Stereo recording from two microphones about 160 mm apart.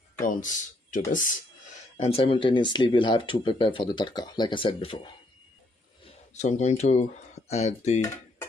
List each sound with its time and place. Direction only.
0.4 s speech: 55° left (ahead or behind)
2.0 s speech: 35° left (ahead or behind)
6.1 s speech: 45° left (ahead or behind)